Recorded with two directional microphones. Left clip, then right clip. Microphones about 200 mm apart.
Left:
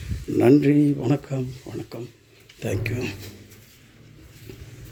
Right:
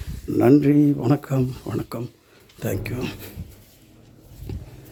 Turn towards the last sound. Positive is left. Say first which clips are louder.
# left 1 dB
turn(degrees=-15)  # may be behind; listen again after turning